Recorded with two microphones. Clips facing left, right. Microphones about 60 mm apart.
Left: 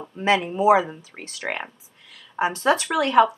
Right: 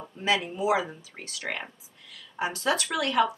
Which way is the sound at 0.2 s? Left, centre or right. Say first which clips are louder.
Left 7 dB; left.